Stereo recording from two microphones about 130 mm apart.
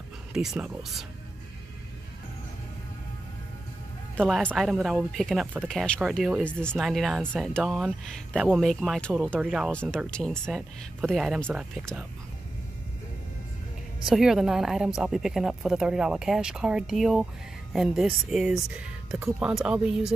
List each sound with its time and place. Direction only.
0.3 s speech: 5° right (ahead or behind)
4.6 s speech: centre (ahead or behind)
9.7 s speech: 10° left (ahead or behind)
14.0 s speech: 5° right (ahead or behind)